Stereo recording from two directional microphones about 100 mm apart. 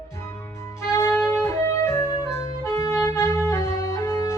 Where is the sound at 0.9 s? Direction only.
25° left (ahead or behind).